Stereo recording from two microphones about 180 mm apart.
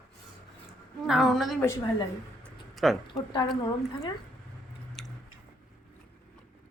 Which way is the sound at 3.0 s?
25° left (ahead or behind).